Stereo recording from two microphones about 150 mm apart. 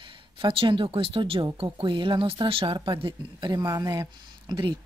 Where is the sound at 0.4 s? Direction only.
35° right (ahead or behind).